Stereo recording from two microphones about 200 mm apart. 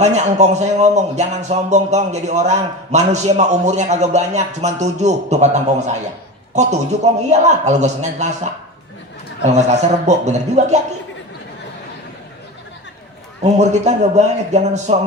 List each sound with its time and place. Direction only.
0.0 s speech: 35° right (ahead or behind)
9.5 s speech: 35° right (ahead or behind)
13.4 s speech: 35° right (ahead or behind)